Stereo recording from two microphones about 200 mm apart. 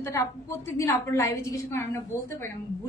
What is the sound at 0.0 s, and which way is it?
A woman's voice, 15° left (ahead or behind).